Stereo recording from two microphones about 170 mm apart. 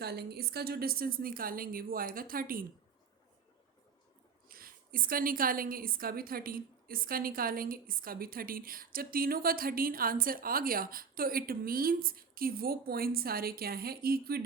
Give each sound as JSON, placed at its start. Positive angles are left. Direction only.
{"t": 0.0, "sound": "a woman's voice", "side_deg": -70}
{"t": 4.4, "sound": "a woman's voice", "side_deg": -60}